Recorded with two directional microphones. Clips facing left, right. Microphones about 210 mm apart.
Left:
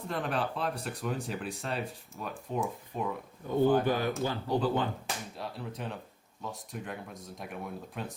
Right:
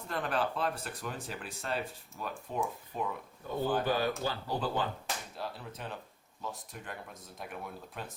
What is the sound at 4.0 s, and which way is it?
Speech, 20° left (ahead or behind).